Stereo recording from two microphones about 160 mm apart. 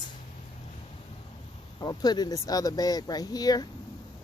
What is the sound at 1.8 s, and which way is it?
Speech, 25° left (ahead or behind).